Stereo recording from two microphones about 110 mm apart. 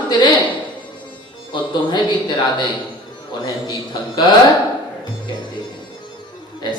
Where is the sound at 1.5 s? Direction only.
45° left (ahead or behind).